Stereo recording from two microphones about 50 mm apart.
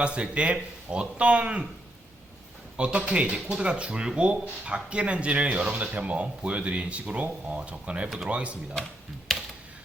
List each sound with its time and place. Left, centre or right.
0.0 s speech: right
2.7 s speech: right